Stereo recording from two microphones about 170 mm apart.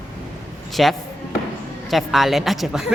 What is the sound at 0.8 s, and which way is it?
Speech, centre (ahead or behind).